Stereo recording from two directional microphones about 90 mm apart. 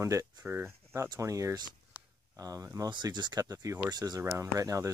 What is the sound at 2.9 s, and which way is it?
Speech, 55° right (ahead or behind).